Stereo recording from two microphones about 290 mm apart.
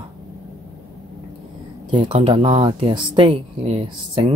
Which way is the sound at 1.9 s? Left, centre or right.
Centre.